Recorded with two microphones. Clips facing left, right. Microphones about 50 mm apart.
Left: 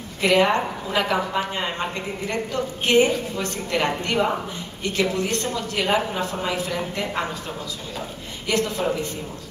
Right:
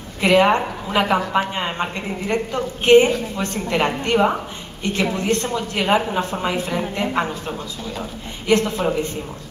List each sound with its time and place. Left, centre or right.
0.2 s a woman's voice: right